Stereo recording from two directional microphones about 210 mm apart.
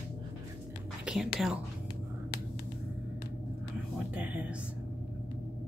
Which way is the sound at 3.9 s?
5° right (ahead or behind).